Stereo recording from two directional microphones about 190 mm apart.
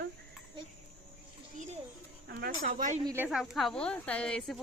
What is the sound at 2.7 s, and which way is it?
Speech, 45° right (ahead or behind).